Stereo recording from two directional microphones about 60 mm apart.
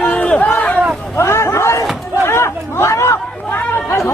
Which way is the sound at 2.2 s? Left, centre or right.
Left.